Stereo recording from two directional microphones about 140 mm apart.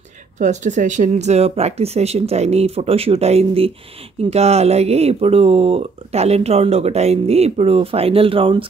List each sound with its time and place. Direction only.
0.4 s speech: 60° right (ahead or behind); by 8.6 s 40° right (ahead or behind)